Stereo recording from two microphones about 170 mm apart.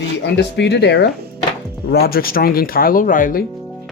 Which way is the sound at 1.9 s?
65° left (ahead or behind).